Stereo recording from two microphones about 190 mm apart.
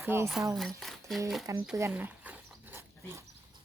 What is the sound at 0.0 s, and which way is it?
Speech, 15° right (ahead or behind).